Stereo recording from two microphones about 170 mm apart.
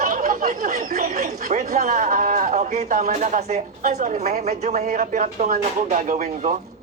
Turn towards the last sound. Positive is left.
turn(degrees=-45)  # may be behind; listen again after turning